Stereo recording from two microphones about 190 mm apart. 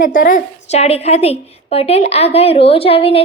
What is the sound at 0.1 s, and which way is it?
A woman's voice, 45° left (ahead or behind).